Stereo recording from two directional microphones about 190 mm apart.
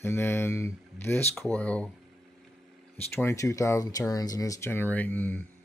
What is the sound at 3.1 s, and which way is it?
Speech, 15° left (ahead or behind).